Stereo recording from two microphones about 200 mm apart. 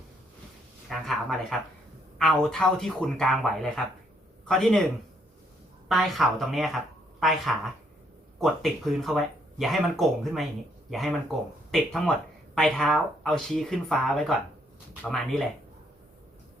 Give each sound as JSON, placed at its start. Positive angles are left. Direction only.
{"t": 0.9, "sound": "speech", "side_deg": 0}
{"t": 5.9, "sound": "speech", "side_deg": 0}
{"t": 11.7, "sound": "speech", "side_deg": 5}